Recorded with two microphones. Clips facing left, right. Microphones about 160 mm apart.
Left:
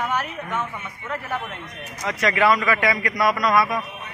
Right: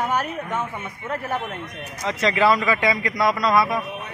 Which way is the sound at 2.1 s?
25° right (ahead or behind).